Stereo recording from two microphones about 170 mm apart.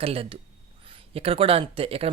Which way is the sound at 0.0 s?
35° right (ahead or behind).